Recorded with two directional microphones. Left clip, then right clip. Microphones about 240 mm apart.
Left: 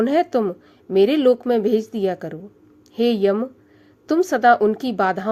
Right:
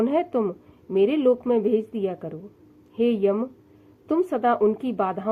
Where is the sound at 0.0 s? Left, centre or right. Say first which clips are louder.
Left 4 dB; left.